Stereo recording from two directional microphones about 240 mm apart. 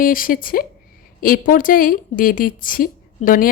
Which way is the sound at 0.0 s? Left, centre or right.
Left.